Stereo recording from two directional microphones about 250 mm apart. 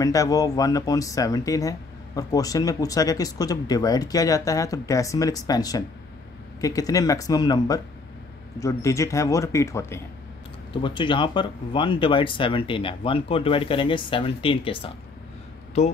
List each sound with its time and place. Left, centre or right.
0.0 s speech: centre